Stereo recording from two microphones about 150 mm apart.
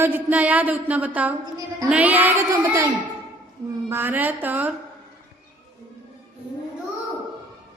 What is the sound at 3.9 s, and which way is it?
Speech, 15° right (ahead or behind).